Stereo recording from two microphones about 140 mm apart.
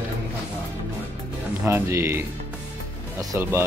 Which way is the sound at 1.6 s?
20° right (ahead or behind).